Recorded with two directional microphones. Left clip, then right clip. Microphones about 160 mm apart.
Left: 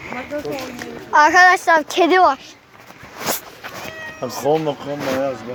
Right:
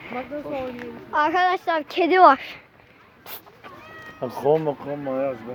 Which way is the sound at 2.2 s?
40° right (ahead or behind).